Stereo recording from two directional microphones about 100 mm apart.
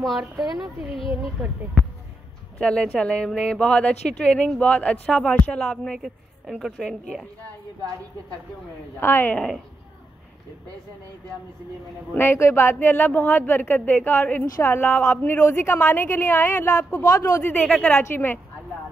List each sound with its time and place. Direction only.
0.0 s a woman's voice: centre (ahead or behind)
2.6 s a woman's voice: 5° left (ahead or behind)
5.9 s a woman's voice: 5° right (ahead or behind)
9.0 s speech: 20° left (ahead or behind)
12.1 s speech: 20° left (ahead or behind)
17.0 s speech: 35° left (ahead or behind)
17.4 s speech: 15° left (ahead or behind)
18.1 s speech: 20° left (ahead or behind)